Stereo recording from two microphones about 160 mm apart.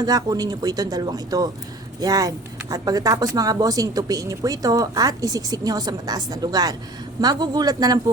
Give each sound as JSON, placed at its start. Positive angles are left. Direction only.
{"t": 0.0, "sound": "a woman's voice", "side_deg": -25}